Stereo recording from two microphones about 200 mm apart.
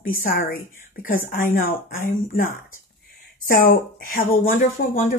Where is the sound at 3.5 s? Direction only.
45° left (ahead or behind).